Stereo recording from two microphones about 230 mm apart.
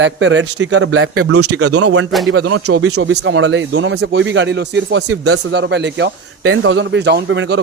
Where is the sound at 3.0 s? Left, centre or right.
Right.